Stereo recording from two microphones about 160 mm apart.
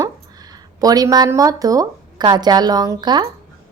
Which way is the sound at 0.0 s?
25° right (ahead or behind).